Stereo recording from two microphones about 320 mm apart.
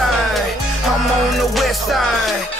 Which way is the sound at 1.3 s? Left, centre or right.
Centre.